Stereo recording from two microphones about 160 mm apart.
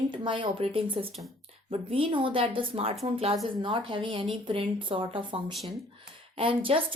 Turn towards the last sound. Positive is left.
turn(degrees=-35)  # may be behind; listen again after turning